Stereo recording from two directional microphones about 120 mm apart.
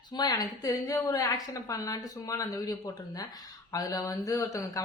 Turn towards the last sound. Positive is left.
turn(degrees=25)  # may be behind; listen again after turning